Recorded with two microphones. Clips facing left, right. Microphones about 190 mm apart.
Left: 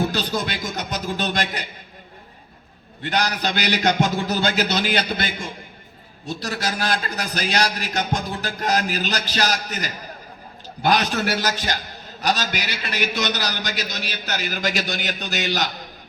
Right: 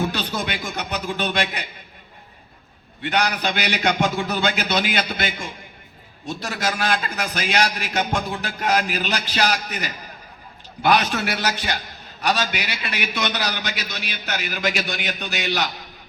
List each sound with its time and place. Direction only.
0.1 s speech: 40° left (ahead or behind)
3.0 s a man's voice: 40° left (ahead or behind)